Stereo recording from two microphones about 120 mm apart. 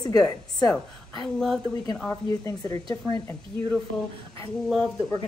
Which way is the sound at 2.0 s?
30° left (ahead or behind).